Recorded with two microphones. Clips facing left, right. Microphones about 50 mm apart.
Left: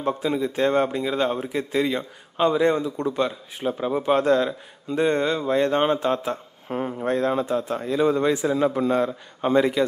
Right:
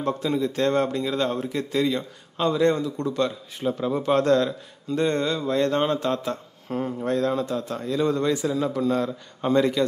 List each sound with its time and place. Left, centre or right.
0.0 s a man's voice: centre
8.5 s a man's voice: left; by 9.8 s centre